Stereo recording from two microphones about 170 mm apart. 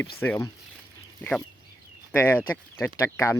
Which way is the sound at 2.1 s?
10° left (ahead or behind).